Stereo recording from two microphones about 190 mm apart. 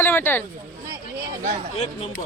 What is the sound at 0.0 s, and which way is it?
Speech, 10° left (ahead or behind).